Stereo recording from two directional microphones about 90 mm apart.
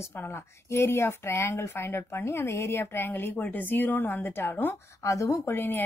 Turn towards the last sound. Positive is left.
turn(degrees=25)  # may be behind; listen again after turning